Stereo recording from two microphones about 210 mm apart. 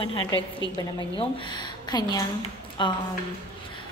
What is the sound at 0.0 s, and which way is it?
Speech, 25° left (ahead or behind).